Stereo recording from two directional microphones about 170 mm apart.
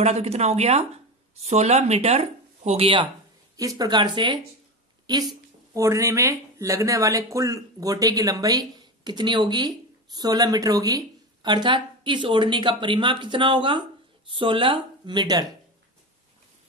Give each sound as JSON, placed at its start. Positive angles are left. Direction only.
{"t": 0.0, "sound": "speech", "side_deg": -40}
{"t": 3.5, "sound": "speech", "side_deg": -20}